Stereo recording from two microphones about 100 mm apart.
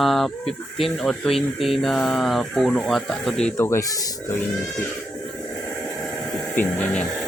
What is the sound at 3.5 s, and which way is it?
Speech, 30° left (ahead or behind).